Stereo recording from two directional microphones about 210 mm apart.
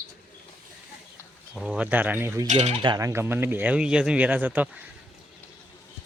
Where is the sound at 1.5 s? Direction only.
Centre (ahead or behind).